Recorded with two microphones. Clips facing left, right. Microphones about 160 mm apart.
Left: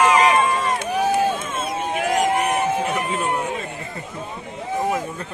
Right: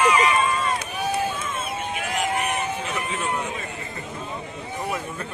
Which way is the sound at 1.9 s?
40° left (ahead or behind).